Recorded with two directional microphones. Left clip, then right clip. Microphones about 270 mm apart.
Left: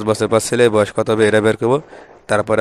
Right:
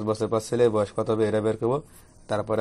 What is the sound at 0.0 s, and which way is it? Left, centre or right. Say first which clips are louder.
Speech: left 10 dB; left.